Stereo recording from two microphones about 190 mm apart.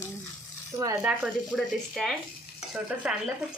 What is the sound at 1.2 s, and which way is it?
Speech, centre (ahead or behind).